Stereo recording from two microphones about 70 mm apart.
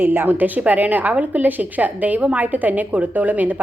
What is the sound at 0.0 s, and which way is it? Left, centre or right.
A woman's voice, right.